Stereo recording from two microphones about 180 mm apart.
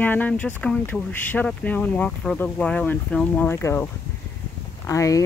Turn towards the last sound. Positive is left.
turn(degrees=15)  # may be behind; listen again after turning